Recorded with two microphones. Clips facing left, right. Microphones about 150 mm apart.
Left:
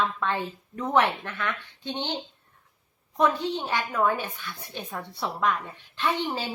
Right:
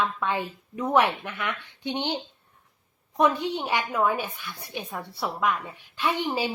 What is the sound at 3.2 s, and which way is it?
Speech, 15° right (ahead or behind).